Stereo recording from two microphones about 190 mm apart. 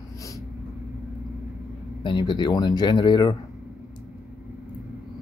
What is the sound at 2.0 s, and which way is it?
Speech, 25° left (ahead or behind).